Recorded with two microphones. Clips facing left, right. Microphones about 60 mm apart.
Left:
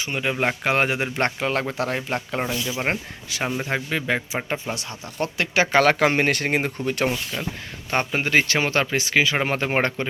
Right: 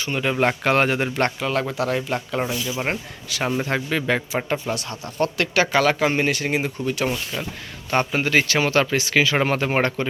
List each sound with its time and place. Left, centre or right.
0.0 s a man's voice: centre
1.4 s speech: left
2.6 s a man's voice: centre
2.8 s speech: left
3.6 s a man's voice: centre
5.7 s speech: left
7.3 s speech: centre
7.9 s speech: left